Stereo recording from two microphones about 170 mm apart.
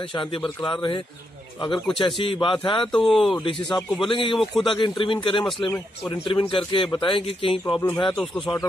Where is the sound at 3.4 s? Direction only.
30° left (ahead or behind).